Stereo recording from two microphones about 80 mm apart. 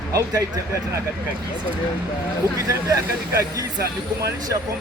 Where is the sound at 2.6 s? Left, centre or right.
Right.